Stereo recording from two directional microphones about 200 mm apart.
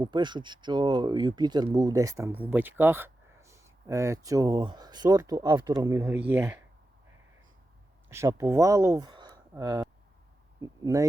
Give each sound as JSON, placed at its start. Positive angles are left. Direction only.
{"t": 0.0, "sound": "speech", "side_deg": -20}
{"t": 8.1, "sound": "speech", "side_deg": -15}